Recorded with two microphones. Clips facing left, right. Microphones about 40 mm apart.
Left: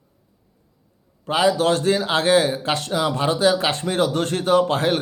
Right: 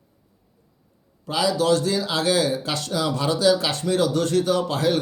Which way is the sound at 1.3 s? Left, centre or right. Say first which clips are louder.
Left 2 dB; left.